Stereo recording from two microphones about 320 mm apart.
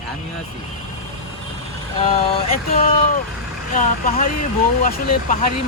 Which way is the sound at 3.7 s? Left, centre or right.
Left.